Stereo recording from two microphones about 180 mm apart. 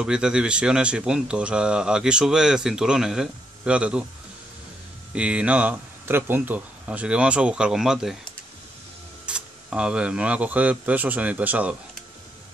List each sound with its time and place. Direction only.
0.0 s speech: 5° right (ahead or behind)
5.1 s speech: 5° right (ahead or behind)
9.2 s speech: 5° right (ahead or behind)